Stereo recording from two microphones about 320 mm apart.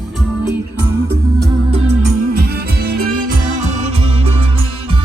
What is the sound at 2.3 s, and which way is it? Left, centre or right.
Music, right.